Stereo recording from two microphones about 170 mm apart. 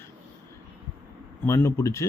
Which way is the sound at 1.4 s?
15° left (ahead or behind).